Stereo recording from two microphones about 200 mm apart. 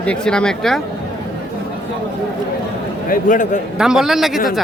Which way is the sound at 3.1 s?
40° left (ahead or behind).